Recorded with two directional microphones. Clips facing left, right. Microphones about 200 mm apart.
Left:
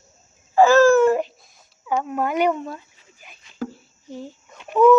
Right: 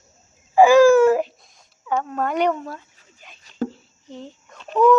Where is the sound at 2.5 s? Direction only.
20° left (ahead or behind).